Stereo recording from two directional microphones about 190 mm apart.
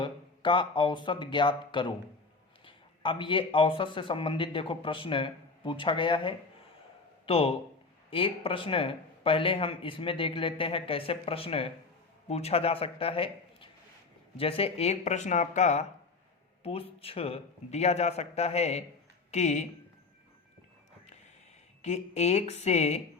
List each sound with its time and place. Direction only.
0.0 s a man's voice: 25° left (ahead or behind)
21.8 s a man's voice: 35° left (ahead or behind)